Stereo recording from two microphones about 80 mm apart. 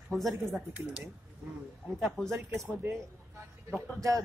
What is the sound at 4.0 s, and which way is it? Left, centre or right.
Speech, right.